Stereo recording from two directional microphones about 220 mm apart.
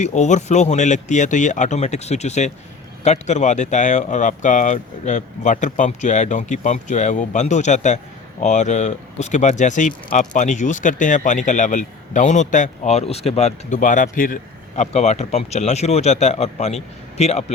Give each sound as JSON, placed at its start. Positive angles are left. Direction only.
{"t": 0.0, "sound": "speech", "side_deg": 30}